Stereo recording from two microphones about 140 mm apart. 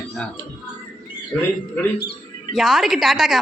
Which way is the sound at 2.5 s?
Centre (ahead or behind).